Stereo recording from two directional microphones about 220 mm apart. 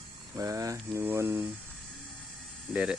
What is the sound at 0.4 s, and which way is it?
Speech, 15° right (ahead or behind).